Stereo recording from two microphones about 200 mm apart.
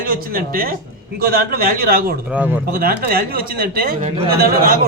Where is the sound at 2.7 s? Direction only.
50° right (ahead or behind).